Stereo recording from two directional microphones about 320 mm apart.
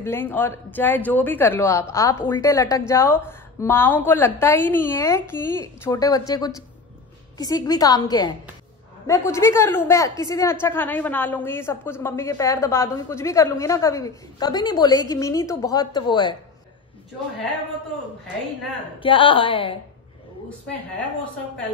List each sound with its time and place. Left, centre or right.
0.0 s a woman's voice: centre
18.9 s a woman's voice: centre